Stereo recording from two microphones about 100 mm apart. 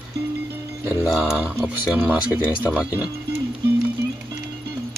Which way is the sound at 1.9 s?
15° right (ahead or behind).